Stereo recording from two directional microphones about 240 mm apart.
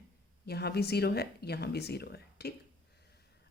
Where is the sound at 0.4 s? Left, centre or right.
Left.